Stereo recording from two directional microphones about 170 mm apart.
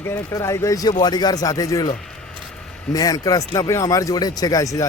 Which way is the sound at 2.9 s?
20° left (ahead or behind).